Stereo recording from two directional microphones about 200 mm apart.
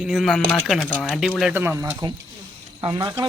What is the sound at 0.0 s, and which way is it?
Speech, centre (ahead or behind).